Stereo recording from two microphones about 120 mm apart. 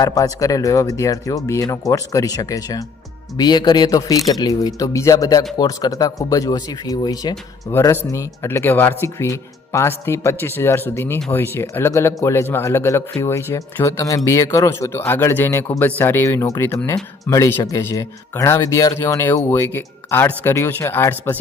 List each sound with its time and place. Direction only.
0.0 s speech: 30° left (ahead or behind)
7.7 s speech: 25° left (ahead or behind)